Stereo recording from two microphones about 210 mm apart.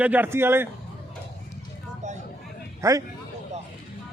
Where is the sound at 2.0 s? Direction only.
35° right (ahead or behind).